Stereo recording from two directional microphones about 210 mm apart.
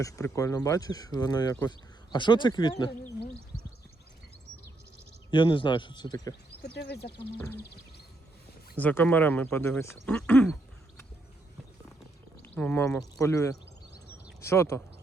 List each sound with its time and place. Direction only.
0.0 s speech: 15° left (ahead or behind)
5.3 s speech: 20° left (ahead or behind)
6.7 s speech: 50° left (ahead or behind)
7.3 s speech: 10° left (ahead or behind)
8.8 s speech: 10° left (ahead or behind)
12.4 s speech: 10° left (ahead or behind)